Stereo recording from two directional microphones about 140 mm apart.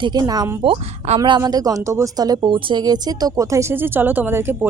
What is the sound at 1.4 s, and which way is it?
Speech, 25° right (ahead or behind).